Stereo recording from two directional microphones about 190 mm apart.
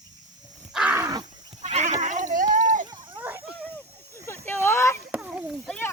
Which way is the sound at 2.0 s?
40° right (ahead or behind).